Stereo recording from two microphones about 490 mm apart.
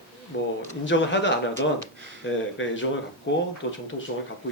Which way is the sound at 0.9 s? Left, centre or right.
Left.